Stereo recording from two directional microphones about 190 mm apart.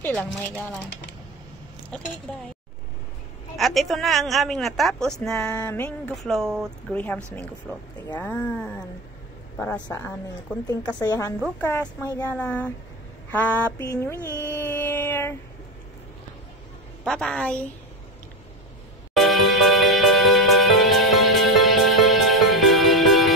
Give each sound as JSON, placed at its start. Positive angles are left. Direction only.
{"t": 0.0, "sound": "speech", "side_deg": 10}
{"t": 3.5, "sound": "a woman's voice", "side_deg": 0}
{"t": 5.3, "sound": "speech", "side_deg": 15}
{"t": 9.8, "sound": "speech", "side_deg": 10}
{"t": 14.4, "sound": "a sound", "side_deg": 10}
{"t": 17.0, "sound": "a woman's voice", "side_deg": 5}
{"t": 19.1, "sound": "music", "side_deg": 0}